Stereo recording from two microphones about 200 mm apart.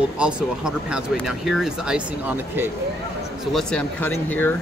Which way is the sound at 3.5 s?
5° left (ahead or behind).